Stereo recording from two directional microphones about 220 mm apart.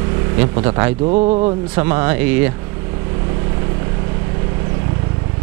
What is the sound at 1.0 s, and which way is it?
A man's voice, 30° right (ahead or behind).